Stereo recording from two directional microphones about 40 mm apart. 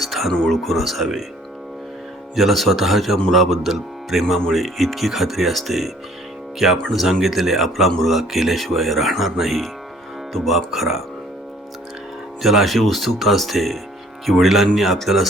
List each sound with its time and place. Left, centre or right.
0.0 s a sound: centre
0.3 s speech: centre
2.3 s speech: centre
6.9 s speech: centre
12.4 s speech: centre